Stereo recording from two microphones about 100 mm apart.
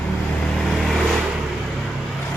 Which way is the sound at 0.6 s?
Centre (ahead or behind).